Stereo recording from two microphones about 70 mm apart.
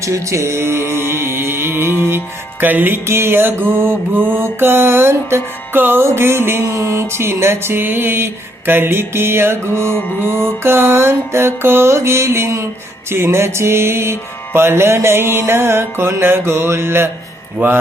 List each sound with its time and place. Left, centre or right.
0.0 s mantra: right
2.0 s music: right
17.6 s mantra: right